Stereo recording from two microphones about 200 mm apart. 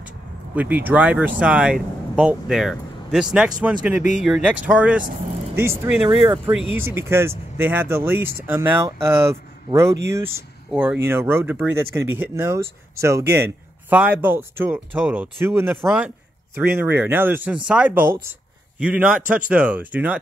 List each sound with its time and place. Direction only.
0.6 s speech: 10° right (ahead or behind)